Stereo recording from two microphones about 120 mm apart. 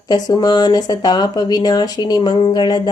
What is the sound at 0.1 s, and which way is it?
Speech, 35° left (ahead or behind).